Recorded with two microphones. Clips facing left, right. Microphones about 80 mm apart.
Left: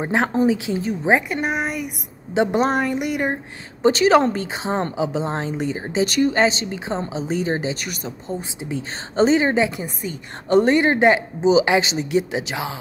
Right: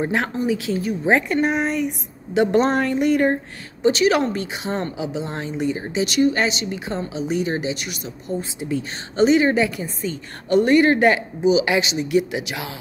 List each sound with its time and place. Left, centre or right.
0.0 s speech: left
2.3 s speech: left
2.6 s speech: centre
3.8 s a woman's voice: left
6.0 s a woman's voice: left
6.3 s a woman's voice: left
8.3 s speech: left
10.5 s speech: left